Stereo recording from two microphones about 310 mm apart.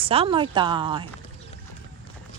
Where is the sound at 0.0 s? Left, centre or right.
Centre.